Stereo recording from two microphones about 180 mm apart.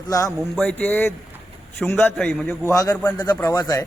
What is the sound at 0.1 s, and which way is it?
Speech, 20° left (ahead or behind).